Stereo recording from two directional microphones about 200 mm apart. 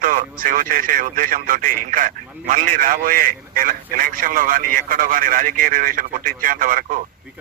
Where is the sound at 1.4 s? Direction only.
45° right (ahead or behind).